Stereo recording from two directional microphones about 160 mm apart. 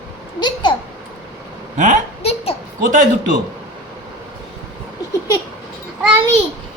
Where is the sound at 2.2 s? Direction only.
40° left (ahead or behind).